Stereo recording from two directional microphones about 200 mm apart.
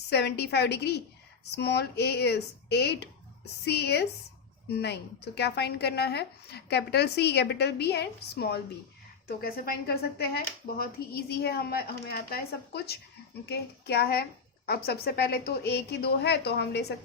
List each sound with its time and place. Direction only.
0.1 s a woman's voice: 55° left (ahead or behind)